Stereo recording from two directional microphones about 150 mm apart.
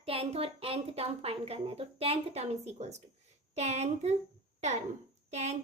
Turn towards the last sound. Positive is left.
turn(degrees=-50)  # may be behind; listen again after turning